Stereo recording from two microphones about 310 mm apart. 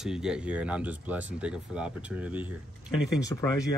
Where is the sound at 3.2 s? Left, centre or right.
Centre.